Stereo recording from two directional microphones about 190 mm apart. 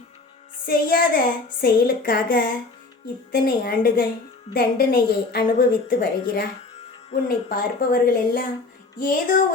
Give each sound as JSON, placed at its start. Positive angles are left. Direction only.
{"t": 0.6, "sound": "a woman's voice", "side_deg": 50}
{"t": 7.5, "sound": "a woman's voice", "side_deg": 50}